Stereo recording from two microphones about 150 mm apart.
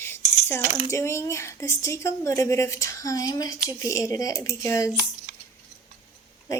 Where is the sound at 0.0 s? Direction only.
15° left (ahead or behind).